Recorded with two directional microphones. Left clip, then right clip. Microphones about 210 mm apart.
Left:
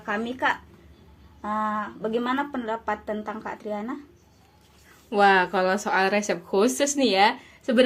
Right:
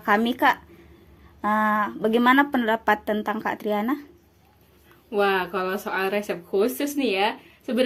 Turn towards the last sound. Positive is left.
turn(degrees=25)  # may be behind; listen again after turning